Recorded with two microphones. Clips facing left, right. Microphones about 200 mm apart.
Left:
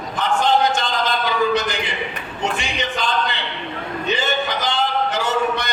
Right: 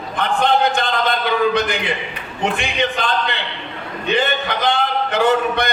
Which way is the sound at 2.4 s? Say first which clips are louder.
Right 3 dB; 55° right (ahead or behind).